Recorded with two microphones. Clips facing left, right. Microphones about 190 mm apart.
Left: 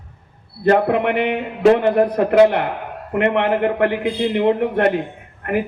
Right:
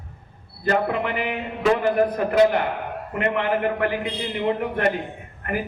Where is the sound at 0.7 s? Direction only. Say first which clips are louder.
Left 7 dB; 60° left (ahead or behind).